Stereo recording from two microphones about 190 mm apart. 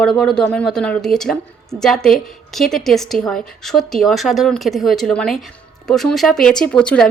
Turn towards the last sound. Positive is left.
turn(degrees=5)  # may be behind; listen again after turning